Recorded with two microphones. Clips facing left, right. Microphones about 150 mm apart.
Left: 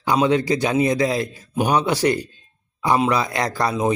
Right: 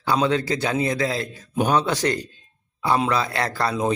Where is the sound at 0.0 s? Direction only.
15° left (ahead or behind).